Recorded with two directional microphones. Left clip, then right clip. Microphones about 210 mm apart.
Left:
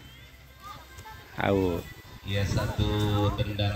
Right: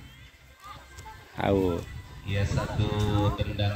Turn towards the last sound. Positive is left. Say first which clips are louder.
# even
turn(degrees=55)  # may be behind; listen again after turning